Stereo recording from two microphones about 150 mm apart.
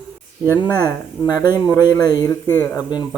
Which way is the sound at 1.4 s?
15° right (ahead or behind).